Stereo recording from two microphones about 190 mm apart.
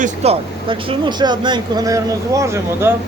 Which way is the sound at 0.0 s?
35° right (ahead or behind).